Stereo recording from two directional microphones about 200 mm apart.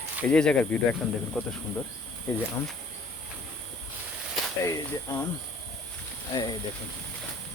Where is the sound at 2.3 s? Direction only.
10° left (ahead or behind).